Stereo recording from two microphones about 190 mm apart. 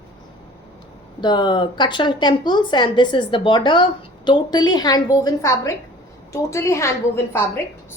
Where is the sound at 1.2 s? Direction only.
25° left (ahead or behind).